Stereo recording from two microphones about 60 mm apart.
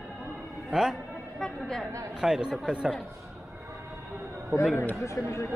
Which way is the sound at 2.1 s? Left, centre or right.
Centre.